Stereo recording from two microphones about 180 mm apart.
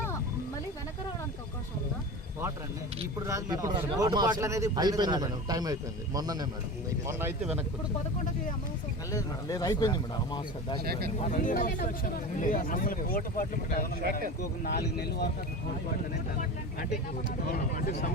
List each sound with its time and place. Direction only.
3.2 s speech: 20° right (ahead or behind)
9.1 s speech: 20° left (ahead or behind)
11.2 s speech: 45° left (ahead or behind)
14.0 s a man's voice: 60° right (ahead or behind)
14.6 s speech: 60° left (ahead or behind)
16.9 s speech: 45° left (ahead or behind)